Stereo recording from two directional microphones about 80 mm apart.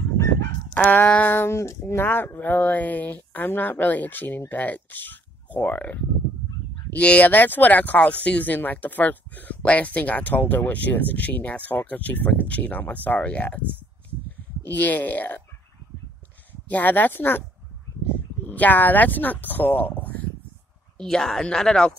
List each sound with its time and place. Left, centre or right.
0.9 s speech: left
16.6 s speech: left
18.5 s speech: left
21.0 s a woman's voice: centre